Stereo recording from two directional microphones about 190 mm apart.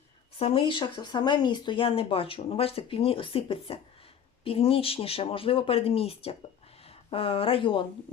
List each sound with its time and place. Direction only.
0.3 s speech: 30° left (ahead or behind)